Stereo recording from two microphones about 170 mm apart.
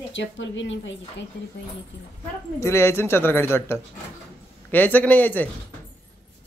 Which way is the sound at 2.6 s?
15° left (ahead or behind).